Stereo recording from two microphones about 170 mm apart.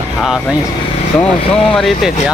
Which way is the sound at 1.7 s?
Centre (ahead or behind).